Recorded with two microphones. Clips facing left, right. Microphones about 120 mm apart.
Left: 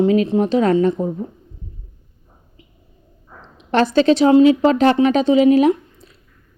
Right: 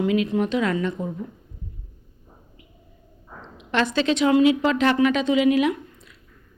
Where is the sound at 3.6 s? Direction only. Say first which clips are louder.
Left 7 dB; 35° left (ahead or behind).